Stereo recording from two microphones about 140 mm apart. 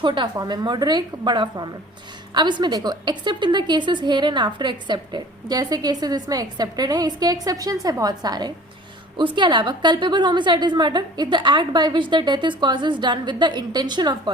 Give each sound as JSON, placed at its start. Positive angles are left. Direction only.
{"t": 0.0, "sound": "a woman's voice", "side_deg": -35}